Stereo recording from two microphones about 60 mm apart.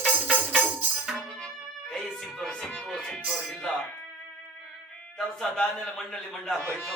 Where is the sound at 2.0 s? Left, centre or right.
Centre.